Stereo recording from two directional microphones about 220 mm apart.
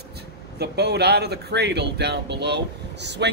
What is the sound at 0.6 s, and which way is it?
Speech, 45° right (ahead or behind).